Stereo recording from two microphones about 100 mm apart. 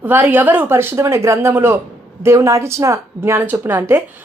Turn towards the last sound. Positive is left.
turn(degrees=-20)  # may be behind; listen again after turning